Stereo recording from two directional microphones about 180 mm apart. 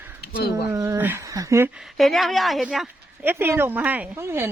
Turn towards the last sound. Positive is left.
turn(degrees=-15)  # may be behind; listen again after turning